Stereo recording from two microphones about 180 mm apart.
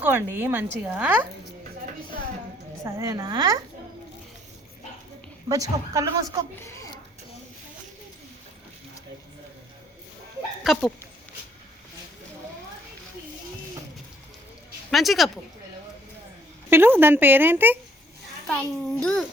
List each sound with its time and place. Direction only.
0.0 s a woman's voice: 10° right (ahead or behind)
2.8 s a woman's voice: 15° right (ahead or behind)
5.5 s a woman's voice: 20° right (ahead or behind)
6.6 s speech: 15° left (ahead or behind)
10.6 s a child's voice: centre (ahead or behind)
14.8 s speech: centre (ahead or behind)
16.6 s speech: 10° right (ahead or behind)
18.4 s a child's voice: 5° left (ahead or behind)